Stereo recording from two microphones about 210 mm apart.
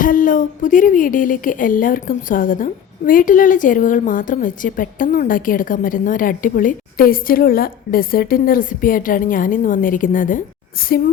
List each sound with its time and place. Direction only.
0.0 s a woman's voice: 40° left (ahead or behind)